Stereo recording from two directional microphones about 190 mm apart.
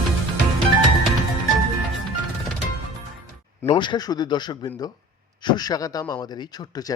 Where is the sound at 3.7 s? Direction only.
25° left (ahead or behind).